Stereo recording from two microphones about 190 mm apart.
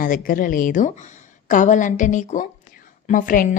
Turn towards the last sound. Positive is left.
turn(degrees=45)  # may be behind; listen again after turning